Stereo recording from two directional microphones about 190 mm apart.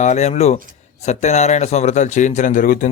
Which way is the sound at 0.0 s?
35° left (ahead or behind).